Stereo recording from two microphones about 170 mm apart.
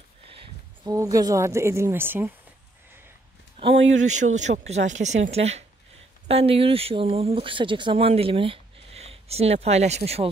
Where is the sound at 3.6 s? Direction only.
30° right (ahead or behind).